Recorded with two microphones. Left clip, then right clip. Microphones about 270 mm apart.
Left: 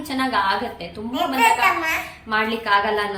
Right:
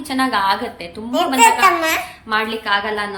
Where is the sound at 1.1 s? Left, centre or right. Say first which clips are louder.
Right 5 dB; right.